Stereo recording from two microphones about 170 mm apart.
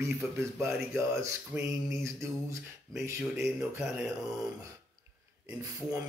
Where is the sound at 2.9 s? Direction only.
Centre (ahead or behind).